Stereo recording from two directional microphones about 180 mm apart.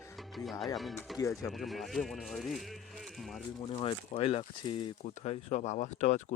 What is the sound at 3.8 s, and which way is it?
Speech, 30° left (ahead or behind).